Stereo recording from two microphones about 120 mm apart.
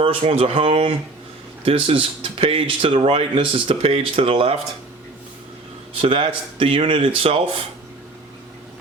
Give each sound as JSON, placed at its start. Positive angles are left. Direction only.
{"t": 0.0, "sound": "speech", "side_deg": -55}
{"t": 6.0, "sound": "speech", "side_deg": -50}